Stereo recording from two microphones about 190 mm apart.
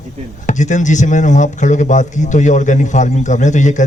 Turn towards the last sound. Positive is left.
turn(degrees=40)  # may be behind; listen again after turning